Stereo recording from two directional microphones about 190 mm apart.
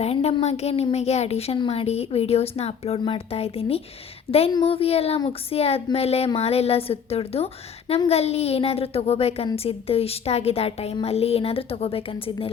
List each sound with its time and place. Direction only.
0.0 s a child's voice: 35° left (ahead or behind)